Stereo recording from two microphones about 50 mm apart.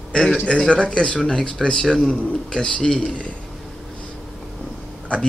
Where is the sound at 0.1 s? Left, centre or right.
Centre.